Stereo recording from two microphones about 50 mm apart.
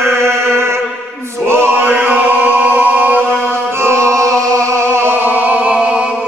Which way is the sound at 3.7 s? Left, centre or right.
Right.